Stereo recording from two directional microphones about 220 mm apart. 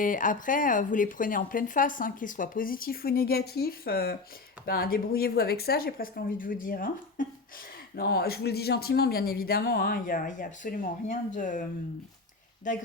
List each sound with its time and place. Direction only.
0.0 s speech: 35° left (ahead or behind)
12.7 s speech: 35° left (ahead or behind)